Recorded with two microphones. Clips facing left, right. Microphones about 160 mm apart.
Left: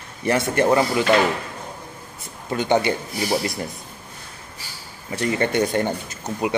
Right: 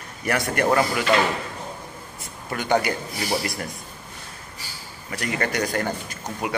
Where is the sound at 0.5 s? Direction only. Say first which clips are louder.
Left 2 dB; 25° left (ahead or behind).